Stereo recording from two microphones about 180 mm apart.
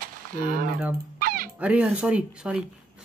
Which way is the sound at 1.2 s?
50° right (ahead or behind).